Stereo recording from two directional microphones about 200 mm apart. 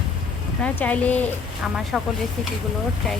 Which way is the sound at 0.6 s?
5° left (ahead or behind).